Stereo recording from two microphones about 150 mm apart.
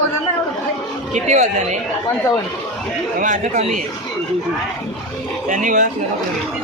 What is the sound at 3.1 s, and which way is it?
Speech, 60° right (ahead or behind).